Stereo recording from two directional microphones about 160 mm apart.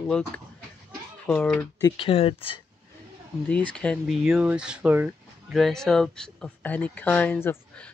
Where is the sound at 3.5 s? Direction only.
10° left (ahead or behind); by 5.1 s 10° right (ahead or behind).